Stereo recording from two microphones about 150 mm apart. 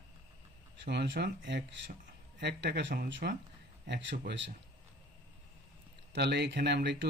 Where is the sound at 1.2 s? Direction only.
90° right.